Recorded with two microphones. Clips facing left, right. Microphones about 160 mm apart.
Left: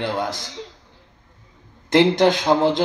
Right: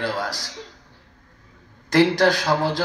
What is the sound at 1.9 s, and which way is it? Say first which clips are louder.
Speech: left 2 dB; 20° left (ahead or behind).